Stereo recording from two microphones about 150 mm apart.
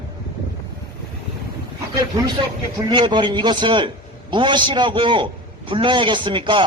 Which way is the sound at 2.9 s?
30° right (ahead or behind).